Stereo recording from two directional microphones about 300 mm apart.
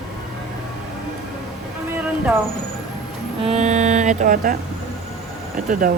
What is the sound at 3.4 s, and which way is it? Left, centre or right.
Speech, right.